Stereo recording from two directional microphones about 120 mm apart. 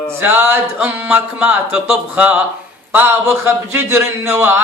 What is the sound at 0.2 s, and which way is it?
Speech, 20° right (ahead or behind).